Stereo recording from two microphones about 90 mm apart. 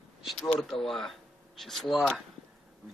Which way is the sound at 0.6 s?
5° left (ahead or behind).